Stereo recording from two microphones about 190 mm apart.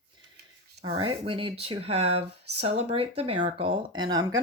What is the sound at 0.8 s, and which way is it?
Speech, 25° right (ahead or behind).